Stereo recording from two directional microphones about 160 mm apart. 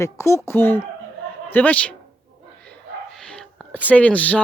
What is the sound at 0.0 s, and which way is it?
Speech, 15° left (ahead or behind).